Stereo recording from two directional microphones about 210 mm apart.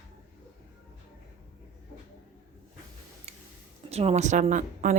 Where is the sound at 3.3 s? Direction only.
30° right (ahead or behind).